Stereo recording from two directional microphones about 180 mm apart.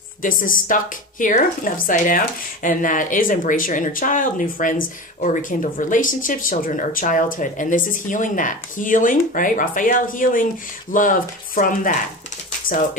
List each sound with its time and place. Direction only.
0.2 s speech: 50° left (ahead or behind)